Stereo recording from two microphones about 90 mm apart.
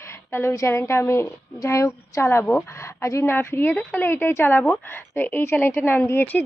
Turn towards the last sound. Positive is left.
turn(degrees=25)  # may be behind; listen again after turning